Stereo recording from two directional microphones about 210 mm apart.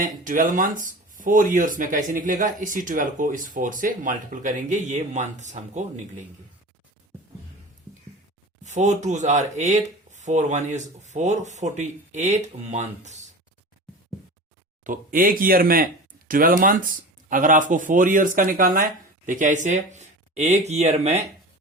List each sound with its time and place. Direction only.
0.3 s speech: 40° right (ahead or behind)
8.6 s speech: 35° right (ahead or behind)
14.8 s speech: 40° right (ahead or behind)